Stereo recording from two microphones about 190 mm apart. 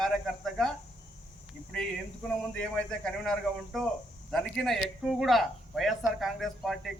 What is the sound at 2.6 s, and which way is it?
A man's voice, 5° left (ahead or behind).